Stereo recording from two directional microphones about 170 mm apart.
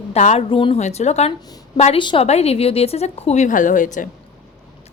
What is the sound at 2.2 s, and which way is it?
A woman's voice, 40° left (ahead or behind).